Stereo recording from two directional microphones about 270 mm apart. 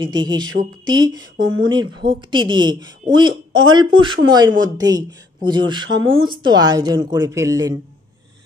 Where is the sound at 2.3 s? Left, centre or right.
Centre.